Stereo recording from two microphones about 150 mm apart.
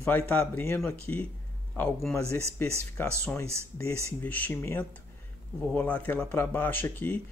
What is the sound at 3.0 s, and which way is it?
Speech, 15° left (ahead or behind).